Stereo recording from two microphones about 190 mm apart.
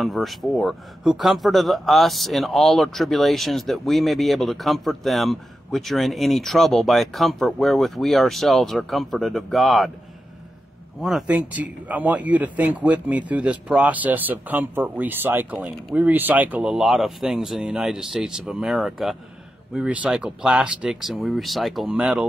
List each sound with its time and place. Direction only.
0.0 s speech: centre (ahead or behind)
11.0 s speech: centre (ahead or behind)